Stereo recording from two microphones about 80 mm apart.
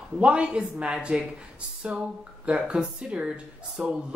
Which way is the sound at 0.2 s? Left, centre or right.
Centre.